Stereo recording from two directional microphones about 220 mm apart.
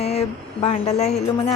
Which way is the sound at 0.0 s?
30° left (ahead or behind).